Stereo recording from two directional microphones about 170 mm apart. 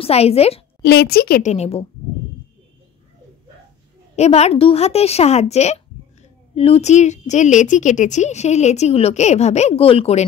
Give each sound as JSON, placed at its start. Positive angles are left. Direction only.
{"t": 0.0, "sound": "a woman's voice", "side_deg": 35}
{"t": 0.8, "sound": "a woman's voice", "side_deg": 70}
{"t": 1.4, "sound": "a woman's voice", "side_deg": 40}
{"t": 4.2, "sound": "a woman's voice", "side_deg": 40}